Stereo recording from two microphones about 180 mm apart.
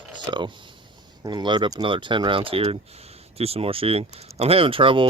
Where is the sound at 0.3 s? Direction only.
25° right (ahead or behind).